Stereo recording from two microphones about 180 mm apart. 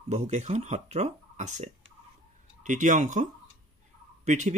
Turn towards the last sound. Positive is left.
turn(degrees=-40)  # may be behind; listen again after turning